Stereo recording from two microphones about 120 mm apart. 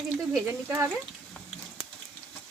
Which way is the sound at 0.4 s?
20° right (ahead or behind).